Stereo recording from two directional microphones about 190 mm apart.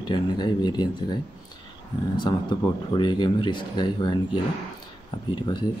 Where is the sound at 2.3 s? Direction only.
25° left (ahead or behind).